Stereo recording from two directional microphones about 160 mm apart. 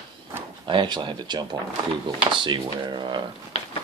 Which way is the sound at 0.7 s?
30° right (ahead or behind).